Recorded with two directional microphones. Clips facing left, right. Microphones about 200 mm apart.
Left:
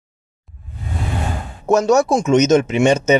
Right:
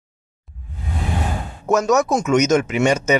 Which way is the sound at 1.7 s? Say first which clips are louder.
Left 3 dB; 30° left (ahead or behind).